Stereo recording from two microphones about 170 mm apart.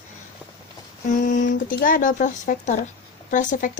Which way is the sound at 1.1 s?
50° left (ahead or behind).